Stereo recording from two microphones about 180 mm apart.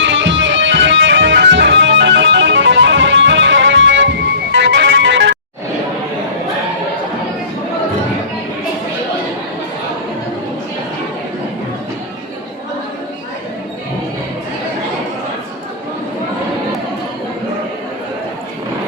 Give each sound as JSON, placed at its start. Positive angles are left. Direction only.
{"t": 0.0, "sound": "music", "side_deg": -90}
{"t": 4.5, "sound": "music", "side_deg": -75}